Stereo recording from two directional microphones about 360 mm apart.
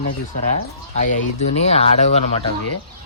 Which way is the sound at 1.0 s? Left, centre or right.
Centre.